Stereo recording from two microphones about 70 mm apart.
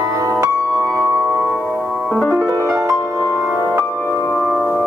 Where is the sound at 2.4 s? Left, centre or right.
Right.